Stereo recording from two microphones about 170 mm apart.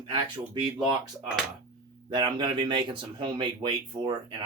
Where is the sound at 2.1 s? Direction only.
25° right (ahead or behind).